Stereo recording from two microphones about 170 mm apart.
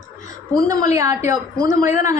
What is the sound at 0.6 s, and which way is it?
A woman's voice, 20° right (ahead or behind).